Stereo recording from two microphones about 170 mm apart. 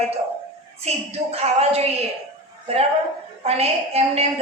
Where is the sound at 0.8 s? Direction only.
35° right (ahead or behind).